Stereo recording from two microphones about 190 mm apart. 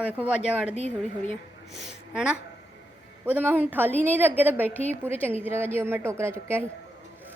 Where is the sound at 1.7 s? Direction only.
5° right (ahead or behind).